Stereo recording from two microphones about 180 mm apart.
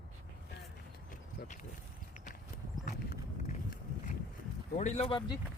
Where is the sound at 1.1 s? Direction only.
45° left (ahead or behind).